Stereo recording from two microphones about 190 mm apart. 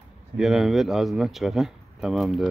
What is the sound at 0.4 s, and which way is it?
A man's voice, centre (ahead or behind).